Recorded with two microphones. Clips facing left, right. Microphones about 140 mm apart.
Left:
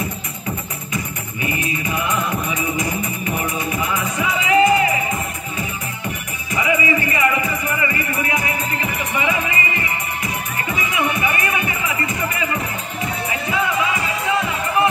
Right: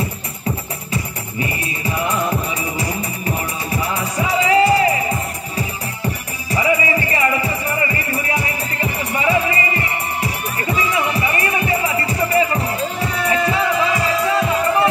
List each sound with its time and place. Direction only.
0.9 s music: 35° right (ahead or behind)
6.5 s music: 35° right (ahead or behind)
13.5 s music: 35° right (ahead or behind)